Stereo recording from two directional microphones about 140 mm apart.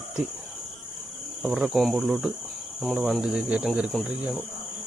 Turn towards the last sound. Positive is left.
turn(degrees=0)  # may be behind; listen again after turning